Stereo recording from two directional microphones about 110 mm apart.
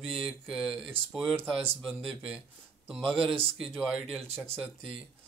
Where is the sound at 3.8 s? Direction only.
5° right (ahead or behind).